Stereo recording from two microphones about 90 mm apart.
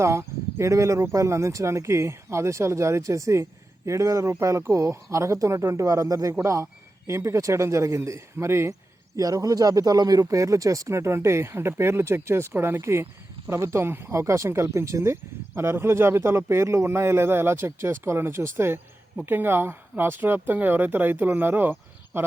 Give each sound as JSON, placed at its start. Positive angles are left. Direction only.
{"t": 0.0, "sound": "speech", "side_deg": -30}
{"t": 9.1, "sound": "speech", "side_deg": -40}